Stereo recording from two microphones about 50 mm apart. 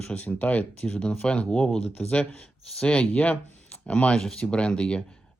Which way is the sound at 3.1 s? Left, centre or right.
Left.